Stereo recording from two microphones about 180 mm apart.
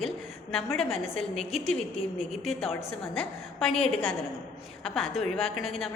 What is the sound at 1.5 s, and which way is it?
Speech, centre (ahead or behind).